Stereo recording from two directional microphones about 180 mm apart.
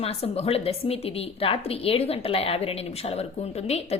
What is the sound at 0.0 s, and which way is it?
A woman's voice, 35° left (ahead or behind).